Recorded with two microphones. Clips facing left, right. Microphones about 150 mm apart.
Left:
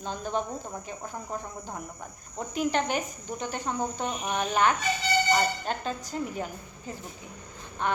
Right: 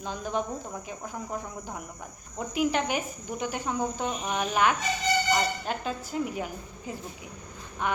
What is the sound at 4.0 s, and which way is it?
A woman's voice, centre (ahead or behind).